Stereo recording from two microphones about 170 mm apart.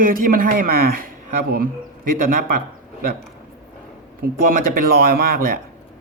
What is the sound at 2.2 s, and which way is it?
Speech, 55° right (ahead or behind).